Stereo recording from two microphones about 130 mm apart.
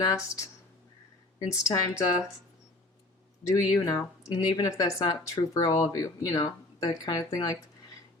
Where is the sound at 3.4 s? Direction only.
30° left (ahead or behind).